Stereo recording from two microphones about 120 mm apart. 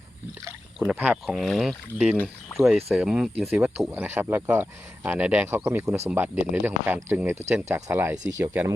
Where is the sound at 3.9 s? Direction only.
15° right (ahead or behind).